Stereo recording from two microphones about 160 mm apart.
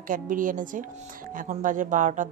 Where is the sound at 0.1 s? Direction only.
55° right (ahead or behind).